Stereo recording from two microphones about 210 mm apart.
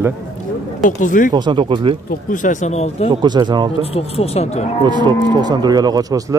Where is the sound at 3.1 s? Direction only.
20° right (ahead or behind).